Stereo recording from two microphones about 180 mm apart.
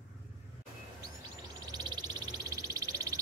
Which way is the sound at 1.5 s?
20° right (ahead or behind).